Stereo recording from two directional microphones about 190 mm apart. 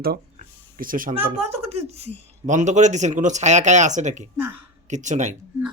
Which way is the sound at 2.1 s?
40° right (ahead or behind).